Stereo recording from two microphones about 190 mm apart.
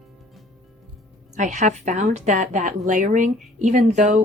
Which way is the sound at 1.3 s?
40° right (ahead or behind).